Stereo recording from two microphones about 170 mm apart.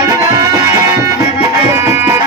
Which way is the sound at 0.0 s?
20° right (ahead or behind).